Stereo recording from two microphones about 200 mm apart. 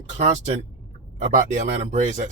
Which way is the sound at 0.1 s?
35° right (ahead or behind).